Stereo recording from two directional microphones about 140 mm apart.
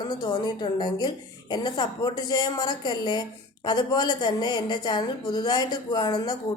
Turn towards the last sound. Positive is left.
turn(degrees=30)  # may be behind; listen again after turning